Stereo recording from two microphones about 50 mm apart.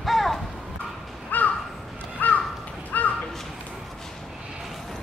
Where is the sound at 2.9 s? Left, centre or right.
Left.